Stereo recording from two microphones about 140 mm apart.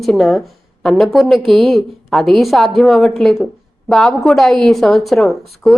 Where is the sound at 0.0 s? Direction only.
Centre (ahead or behind).